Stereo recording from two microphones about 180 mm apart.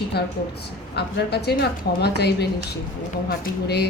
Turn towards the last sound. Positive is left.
turn(degrees=65)  # may be behind; listen again after turning